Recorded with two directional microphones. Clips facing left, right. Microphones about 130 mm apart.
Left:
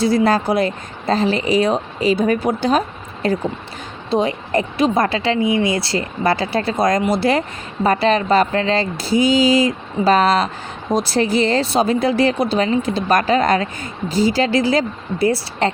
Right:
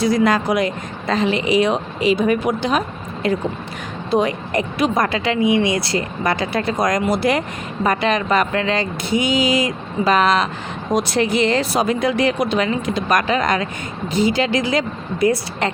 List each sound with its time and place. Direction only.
0.0 s a woman's voice: 30° left (ahead or behind)
5.5 s speech: 20° right (ahead or behind)
5.7 s a woman's voice: 30° left (ahead or behind)